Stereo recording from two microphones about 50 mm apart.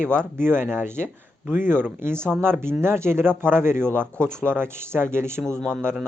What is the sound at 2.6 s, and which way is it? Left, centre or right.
Speech, right.